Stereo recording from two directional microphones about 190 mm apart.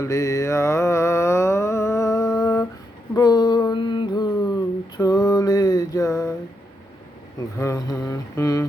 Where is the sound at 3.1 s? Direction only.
20° left (ahead or behind).